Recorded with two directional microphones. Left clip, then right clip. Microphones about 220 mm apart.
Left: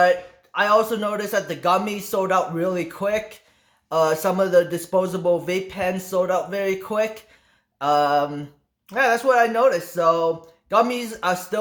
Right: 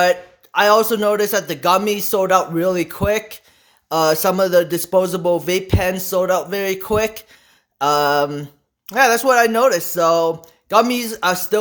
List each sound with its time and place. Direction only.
0.0 s speech: 50° right (ahead or behind)